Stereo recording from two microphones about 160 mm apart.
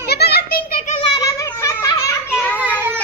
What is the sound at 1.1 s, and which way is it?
Speech, 20° left (ahead or behind).